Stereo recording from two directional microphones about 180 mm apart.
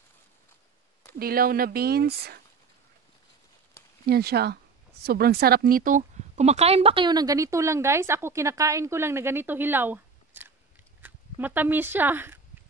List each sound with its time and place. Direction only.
1.2 s speech: 55° right (ahead or behind)
4.0 s a woman's voice: 60° right (ahead or behind); by 12.4 s 10° right (ahead or behind)